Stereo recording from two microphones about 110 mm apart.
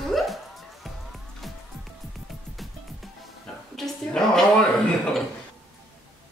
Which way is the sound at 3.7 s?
5° left (ahead or behind).